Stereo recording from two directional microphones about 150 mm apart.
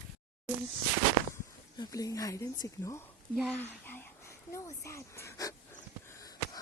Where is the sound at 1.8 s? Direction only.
25° left (ahead or behind).